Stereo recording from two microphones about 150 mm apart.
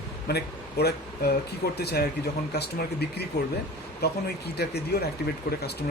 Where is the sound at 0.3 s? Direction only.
90° left.